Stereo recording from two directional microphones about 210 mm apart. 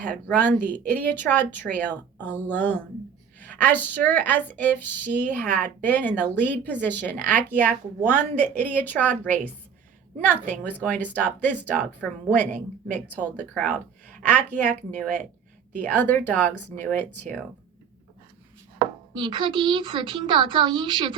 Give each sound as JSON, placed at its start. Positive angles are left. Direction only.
{"t": 0.0, "sound": "a woman's voice", "side_deg": 10}
{"t": 10.5, "sound": "a woman's voice", "side_deg": 10}
{"t": 19.1, "sound": "a child's voice", "side_deg": -20}